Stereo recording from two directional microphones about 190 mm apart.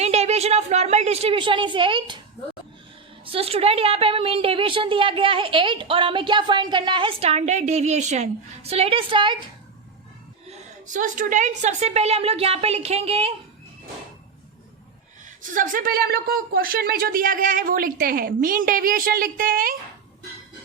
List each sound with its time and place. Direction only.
0.0 s a woman's voice: 35° right (ahead or behind)
3.2 s a woman's voice: 30° right (ahead or behind)
10.8 s a woman's voice: 40° right (ahead or behind)
15.4 s speech: 45° right (ahead or behind)